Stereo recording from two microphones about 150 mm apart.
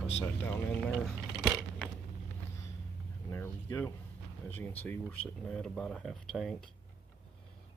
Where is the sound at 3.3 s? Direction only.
15° left (ahead or behind).